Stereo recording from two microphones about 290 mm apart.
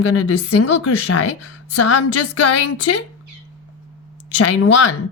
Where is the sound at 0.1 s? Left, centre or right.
Left.